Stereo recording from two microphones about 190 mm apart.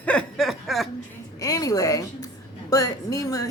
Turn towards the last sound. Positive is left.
turn(degrees=20)  # may be behind; listen again after turning